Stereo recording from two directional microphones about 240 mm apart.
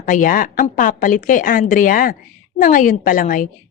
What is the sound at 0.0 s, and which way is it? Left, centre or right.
A woman's voice, left.